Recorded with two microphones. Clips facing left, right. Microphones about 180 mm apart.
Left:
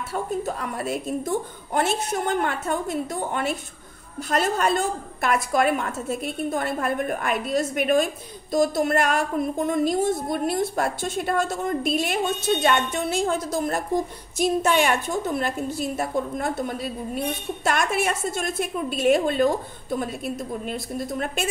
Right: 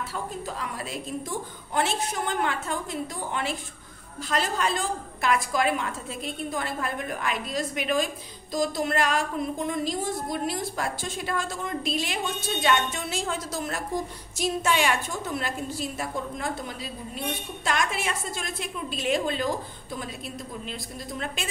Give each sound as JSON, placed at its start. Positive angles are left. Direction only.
{"t": 0.1, "sound": "a woman's voice", "side_deg": 55}